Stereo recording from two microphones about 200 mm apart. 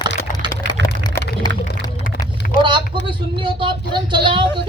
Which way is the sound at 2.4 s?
45° left (ahead or behind).